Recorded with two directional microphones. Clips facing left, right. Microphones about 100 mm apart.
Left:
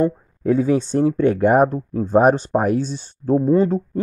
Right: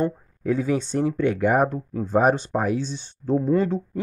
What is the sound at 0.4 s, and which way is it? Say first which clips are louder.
Speech: left 6 dB; 35° left (ahead or behind).